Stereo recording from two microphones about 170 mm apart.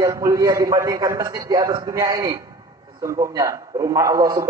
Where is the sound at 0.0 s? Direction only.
20° right (ahead or behind).